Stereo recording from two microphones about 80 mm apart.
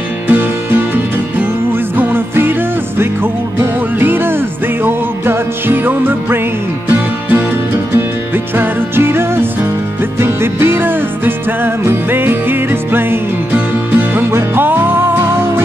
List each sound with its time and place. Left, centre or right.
0.3 s music: right
4.0 s music: right